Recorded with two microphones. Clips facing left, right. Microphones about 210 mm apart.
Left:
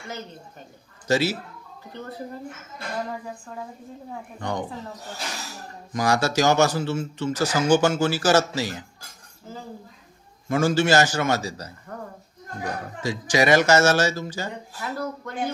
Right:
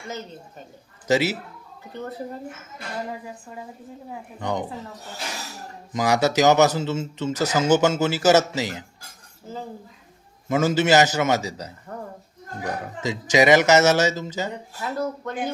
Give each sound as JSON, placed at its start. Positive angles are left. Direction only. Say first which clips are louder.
{"t": 1.0, "sound": "a man's voice", "louder": "right 1 dB", "side_deg": -20}
{"t": 4.1, "sound": "speech", "louder": "right 2 dB", "side_deg": -15}
{"t": 5.9, "sound": "a man's voice", "louder": "right 2 dB", "side_deg": -20}
{"t": 10.5, "sound": "a man's voice", "louder": "right 1 dB", "side_deg": -20}
{"t": 13.0, "sound": "a man's voice", "louder": "right 3 dB", "side_deg": -20}